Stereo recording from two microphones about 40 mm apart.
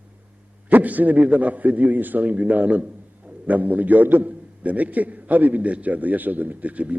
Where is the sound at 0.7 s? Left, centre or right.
Right.